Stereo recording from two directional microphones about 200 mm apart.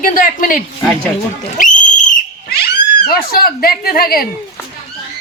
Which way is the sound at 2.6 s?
50° left (ahead or behind).